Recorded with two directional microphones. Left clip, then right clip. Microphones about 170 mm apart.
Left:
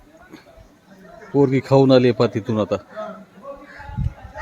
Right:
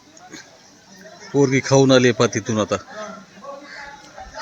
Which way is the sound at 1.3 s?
10° left (ahead or behind).